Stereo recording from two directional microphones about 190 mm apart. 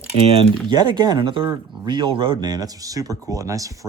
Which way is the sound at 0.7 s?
25° right (ahead or behind).